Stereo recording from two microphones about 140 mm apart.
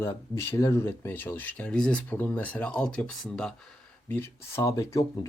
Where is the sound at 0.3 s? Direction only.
20° left (ahead or behind); by 3.5 s 5° left (ahead or behind).